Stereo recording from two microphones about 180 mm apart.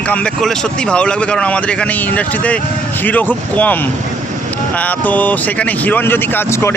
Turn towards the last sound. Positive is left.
turn(degrees=15)  # may be behind; listen again after turning